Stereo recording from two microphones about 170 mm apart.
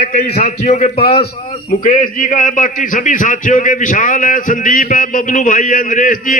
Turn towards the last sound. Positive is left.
turn(degrees=50)  # may be behind; listen again after turning